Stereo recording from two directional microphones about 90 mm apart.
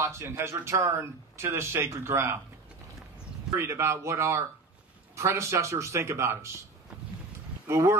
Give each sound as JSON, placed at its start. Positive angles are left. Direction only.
{"t": 0.0, "sound": "a man's voice", "side_deg": -30}
{"t": 3.5, "sound": "a man's voice", "side_deg": -30}
{"t": 7.6, "sound": "a man's voice", "side_deg": -30}